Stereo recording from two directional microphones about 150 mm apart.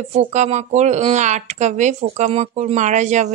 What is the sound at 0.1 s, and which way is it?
Speech, 50° right (ahead or behind).